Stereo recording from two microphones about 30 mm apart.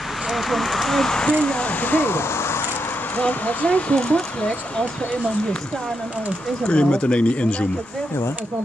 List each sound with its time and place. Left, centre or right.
0.3 s speech: centre
0.9 s speech: left
1.3 s speech: left
1.7 s speech: left
3.2 s speech: left
3.9 s speech: left
6.6 s speech: left